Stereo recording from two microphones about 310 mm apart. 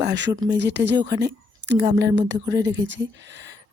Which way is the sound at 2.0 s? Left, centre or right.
Right.